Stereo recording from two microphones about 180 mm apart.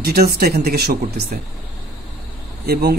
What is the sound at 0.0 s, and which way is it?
Speech, 60° right (ahead or behind).